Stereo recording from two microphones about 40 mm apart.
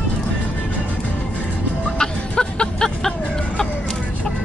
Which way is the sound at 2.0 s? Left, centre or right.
Left.